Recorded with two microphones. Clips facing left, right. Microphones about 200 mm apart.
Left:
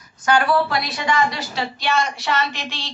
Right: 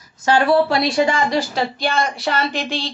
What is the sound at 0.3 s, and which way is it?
Speech, 25° right (ahead or behind).